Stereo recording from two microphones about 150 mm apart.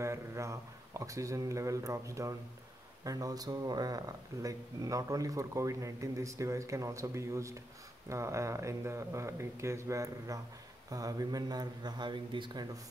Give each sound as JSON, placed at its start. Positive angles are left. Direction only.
{"t": 0.0, "sound": "speech", "side_deg": -20}